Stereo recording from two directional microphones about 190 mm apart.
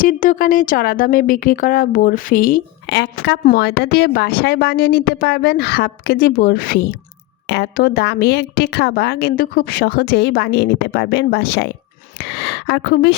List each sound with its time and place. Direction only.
0.0 s a woman's voice: 45° left (ahead or behind)